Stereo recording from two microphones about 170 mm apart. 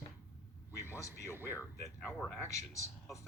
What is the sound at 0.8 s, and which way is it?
Speech, 15° left (ahead or behind).